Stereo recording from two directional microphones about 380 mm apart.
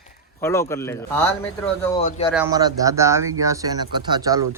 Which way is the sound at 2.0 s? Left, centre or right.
Centre.